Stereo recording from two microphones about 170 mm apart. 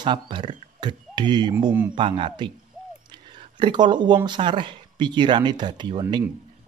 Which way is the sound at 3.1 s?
25° right (ahead or behind).